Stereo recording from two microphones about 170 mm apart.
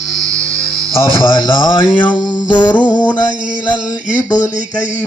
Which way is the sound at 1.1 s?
30° left (ahead or behind).